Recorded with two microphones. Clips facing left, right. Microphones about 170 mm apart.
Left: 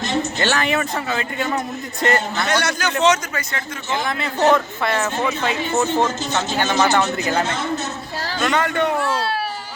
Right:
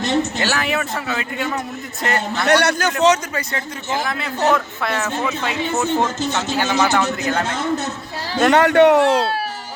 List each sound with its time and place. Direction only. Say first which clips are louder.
0.3 s speech: left 1 dB; 5° right (ahead or behind)
2.5 s a man's voice: right 7 dB; 65° right (ahead or behind)
3.0 s speech: right 1 dB; 35° right (ahead or behind)
3.9 s speech: left 1 dB; centre (ahead or behind)
8.4 s speech: right 8 dB; 65° right (ahead or behind)